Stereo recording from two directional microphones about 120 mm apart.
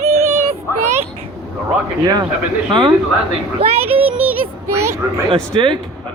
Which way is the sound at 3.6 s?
55° right (ahead or behind).